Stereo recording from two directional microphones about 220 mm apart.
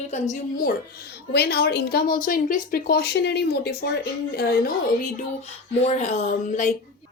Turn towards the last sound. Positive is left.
turn(degrees=35)  # may be behind; listen again after turning